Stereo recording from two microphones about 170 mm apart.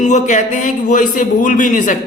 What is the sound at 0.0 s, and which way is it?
A man's voice, 45° left (ahead or behind).